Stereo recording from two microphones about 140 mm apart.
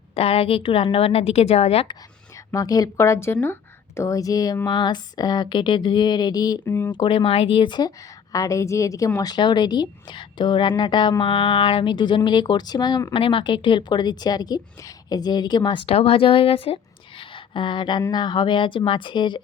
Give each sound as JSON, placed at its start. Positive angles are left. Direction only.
{"t": 0.1, "sound": "a woman's voice", "side_deg": 45}
{"t": 2.5, "sound": "a woman's voice", "side_deg": 25}
{"t": 13.1, "sound": "a woman's voice", "side_deg": 40}
{"t": 17.2, "sound": "a sound", "side_deg": 35}
{"t": 18.1, "sound": "a woman's voice", "side_deg": 30}